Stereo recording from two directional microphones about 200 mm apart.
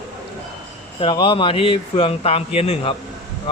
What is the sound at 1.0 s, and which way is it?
Speech, 25° left (ahead or behind).